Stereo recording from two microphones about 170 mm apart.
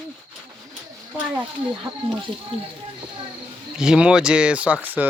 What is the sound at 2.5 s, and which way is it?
Speech, 35° right (ahead or behind).